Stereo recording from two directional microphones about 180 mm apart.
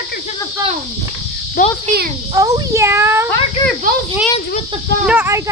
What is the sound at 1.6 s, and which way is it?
Speech, 50° left (ahead or behind).